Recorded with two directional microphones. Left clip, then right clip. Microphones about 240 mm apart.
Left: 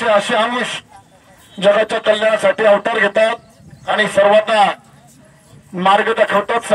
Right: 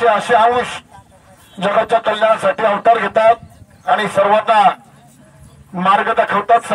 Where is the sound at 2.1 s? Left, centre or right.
Left.